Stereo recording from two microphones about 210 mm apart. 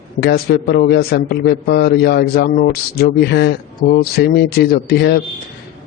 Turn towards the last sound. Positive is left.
turn(degrees=50)  # may be behind; listen again after turning